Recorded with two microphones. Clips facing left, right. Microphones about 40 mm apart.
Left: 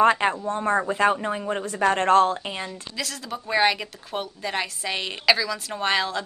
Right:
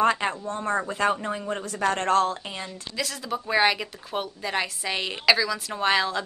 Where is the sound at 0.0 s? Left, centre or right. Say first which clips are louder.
Left 4 dB; centre.